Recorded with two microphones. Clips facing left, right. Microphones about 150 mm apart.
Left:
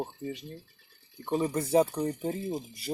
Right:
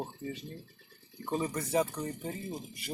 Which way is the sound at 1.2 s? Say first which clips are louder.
Left 4 dB; 20° left (ahead or behind).